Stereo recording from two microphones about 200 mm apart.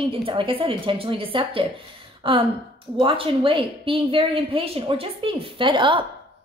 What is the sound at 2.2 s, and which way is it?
Gasp, 25° right (ahead or behind).